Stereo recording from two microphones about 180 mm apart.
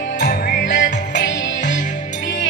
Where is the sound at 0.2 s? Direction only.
70° left (ahead or behind).